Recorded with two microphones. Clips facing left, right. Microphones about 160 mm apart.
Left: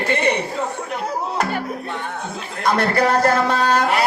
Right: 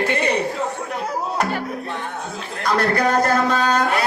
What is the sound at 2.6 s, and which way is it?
Speech, 25° left (ahead or behind).